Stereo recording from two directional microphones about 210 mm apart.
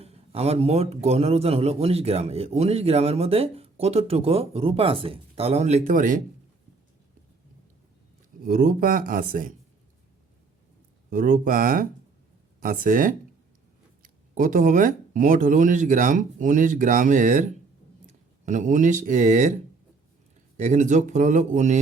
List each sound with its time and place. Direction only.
0.0 s a man's voice: 30° right (ahead or behind)
8.4 s speech: 40° right (ahead or behind)
11.1 s speech: 40° right (ahead or behind)
18.4 s speech: 35° right (ahead or behind)
20.6 s speech: 35° right (ahead or behind)